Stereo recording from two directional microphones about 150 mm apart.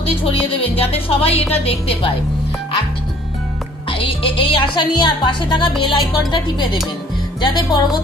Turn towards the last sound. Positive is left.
turn(degrees=25)  # may be behind; listen again after turning